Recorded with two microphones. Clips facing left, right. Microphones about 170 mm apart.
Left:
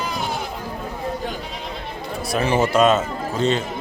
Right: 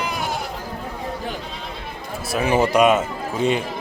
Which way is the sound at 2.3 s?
15° right (ahead or behind).